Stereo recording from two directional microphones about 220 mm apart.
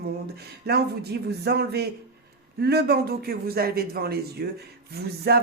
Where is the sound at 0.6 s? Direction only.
45° right (ahead or behind).